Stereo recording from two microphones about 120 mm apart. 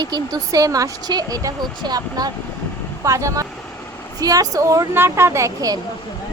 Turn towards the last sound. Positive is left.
turn(degrees=-30)  # may be behind; listen again after turning